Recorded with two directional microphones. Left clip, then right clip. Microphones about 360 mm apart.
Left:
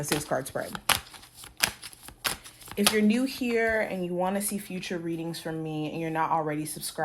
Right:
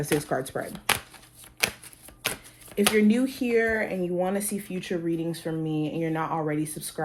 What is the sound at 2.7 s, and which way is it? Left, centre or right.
Speech, left.